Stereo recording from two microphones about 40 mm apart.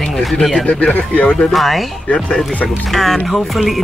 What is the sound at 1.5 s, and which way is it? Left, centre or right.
Speech, centre.